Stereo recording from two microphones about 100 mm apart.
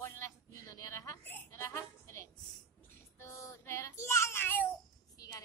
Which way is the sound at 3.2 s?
30° left (ahead or behind).